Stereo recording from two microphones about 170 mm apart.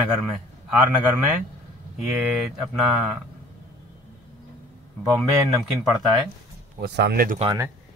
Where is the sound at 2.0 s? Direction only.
10° right (ahead or behind).